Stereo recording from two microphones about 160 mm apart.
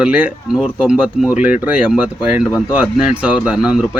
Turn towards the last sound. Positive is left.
turn(degrees=0)  # may be behind; listen again after turning